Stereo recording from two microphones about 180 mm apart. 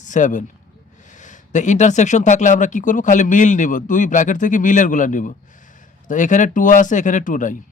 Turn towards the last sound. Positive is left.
turn(degrees=45)  # may be behind; listen again after turning